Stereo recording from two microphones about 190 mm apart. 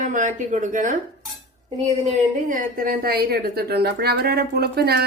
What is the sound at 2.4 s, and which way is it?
A woman's voice, 45° right (ahead or behind).